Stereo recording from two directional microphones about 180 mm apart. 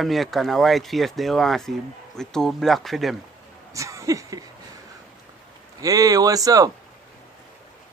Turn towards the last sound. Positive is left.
turn(degrees=-20)  # may be behind; listen again after turning